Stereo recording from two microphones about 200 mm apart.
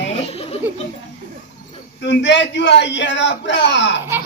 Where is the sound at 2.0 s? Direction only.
60° left (ahead or behind).